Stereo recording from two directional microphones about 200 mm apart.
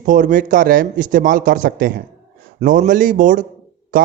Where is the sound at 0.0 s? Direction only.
40° right (ahead or behind).